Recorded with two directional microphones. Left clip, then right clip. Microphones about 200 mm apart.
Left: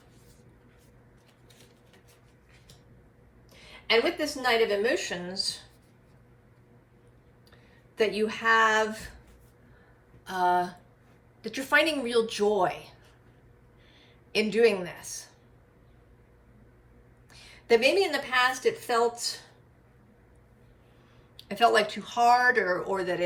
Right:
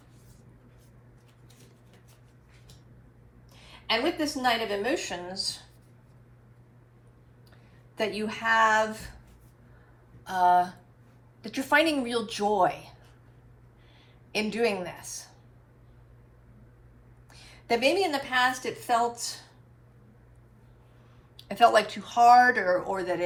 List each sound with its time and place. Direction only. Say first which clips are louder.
3.5 s a woman's voice: left 4 dB; 20° right (ahead or behind)
7.5 s speech: left 3 dB; 20° right (ahead or behind)
10.2 s a woman's voice: right 3 dB; 25° right (ahead or behind)
14.3 s a woman's voice: left 4 dB; 20° right (ahead or behind)
17.2 s a woman's voice: left 3 dB; 20° right (ahead or behind)
21.3 s a woman's voice: right 2 dB; 25° right (ahead or behind)